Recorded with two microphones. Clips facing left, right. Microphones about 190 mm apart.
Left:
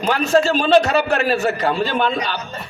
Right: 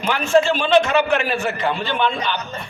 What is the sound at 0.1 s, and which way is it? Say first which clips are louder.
A man's voice: even; 40° left (ahead or behind).